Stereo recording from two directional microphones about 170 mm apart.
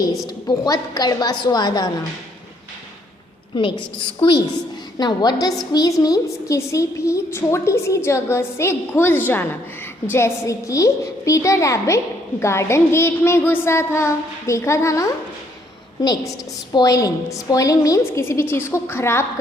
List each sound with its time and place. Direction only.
0.3 s a woman's voice: 25° left (ahead or behind)
3.5 s a woman's voice: 30° left (ahead or behind); by 19.2 s 15° left (ahead or behind)